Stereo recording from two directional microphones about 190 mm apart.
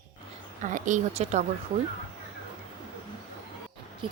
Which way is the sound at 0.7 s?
40° right (ahead or behind).